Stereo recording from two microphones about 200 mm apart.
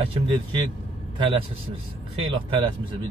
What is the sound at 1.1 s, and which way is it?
A man's voice, 25° right (ahead or behind).